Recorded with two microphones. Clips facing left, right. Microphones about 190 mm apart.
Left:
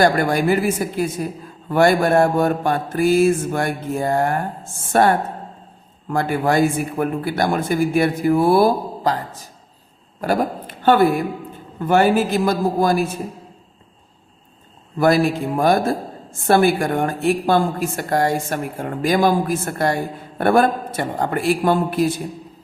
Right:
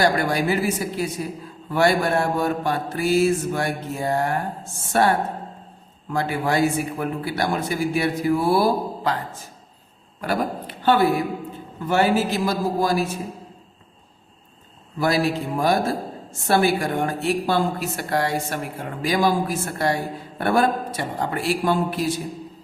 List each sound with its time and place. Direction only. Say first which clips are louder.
0.0 s mantra: left 4 dB; 50° left (ahead or behind)
9.0 s speech: left 7 dB; 40° left (ahead or behind)
10.2 s a sound: left 4 dB; 45° left (ahead or behind)
11.9 s mantra: left 4 dB; 50° left (ahead or behind)
14.9 s mantra: left 5 dB; 50° left (ahead or behind)